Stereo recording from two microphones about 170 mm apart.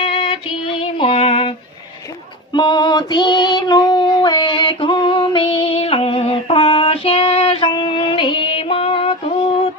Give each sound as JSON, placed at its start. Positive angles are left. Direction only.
{"t": 0.0, "sound": "music", "side_deg": 30}
{"t": 2.5, "sound": "child singing", "side_deg": 25}